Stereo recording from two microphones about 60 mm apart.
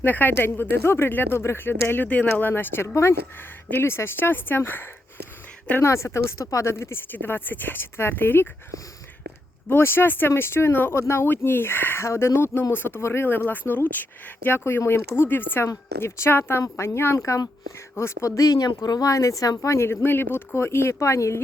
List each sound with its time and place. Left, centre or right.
0.0 s speech: left
2.8 s speech: left
5.8 s speech: left
6.4 s speech: left
6.7 s speech: left
7.1 s speech: left
9.6 s speech: left
13.0 s speech: left
13.2 s speech: left
14.6 s speech: left
17.2 s speech: left
17.9 s speech: left
18.3 s speech: left
19.8 s speech: left